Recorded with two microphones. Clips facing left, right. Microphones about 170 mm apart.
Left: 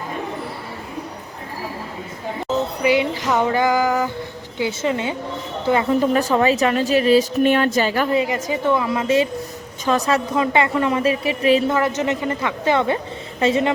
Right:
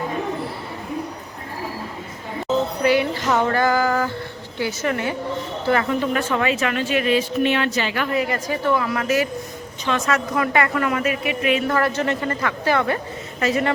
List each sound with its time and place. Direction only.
2.8 s music: 15° left (ahead or behind)
4.5 s a woman's voice: 20° left (ahead or behind)
5.9 s a woman's voice: 40° left (ahead or behind)
9.8 s a woman's voice: 40° left (ahead or behind)
10.3 s a woman's voice: 25° left (ahead or behind)
11.7 s a woman's voice: 20° left (ahead or behind)